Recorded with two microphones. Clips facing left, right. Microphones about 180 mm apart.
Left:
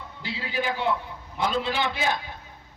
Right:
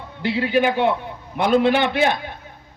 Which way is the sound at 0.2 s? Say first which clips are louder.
Right 12 dB; 65° right (ahead or behind).